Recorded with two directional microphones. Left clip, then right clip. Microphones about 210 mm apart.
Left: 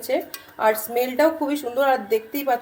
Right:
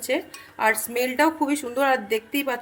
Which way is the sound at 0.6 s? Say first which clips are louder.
Left 2 dB; 35° right (ahead or behind).